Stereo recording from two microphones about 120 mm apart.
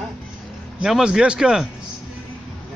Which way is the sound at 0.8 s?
5° right (ahead or behind).